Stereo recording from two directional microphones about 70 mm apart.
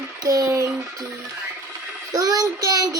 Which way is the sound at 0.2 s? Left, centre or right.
Right.